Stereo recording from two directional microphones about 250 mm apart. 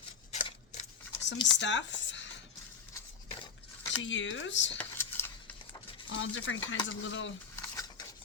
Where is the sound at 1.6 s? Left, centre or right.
Left.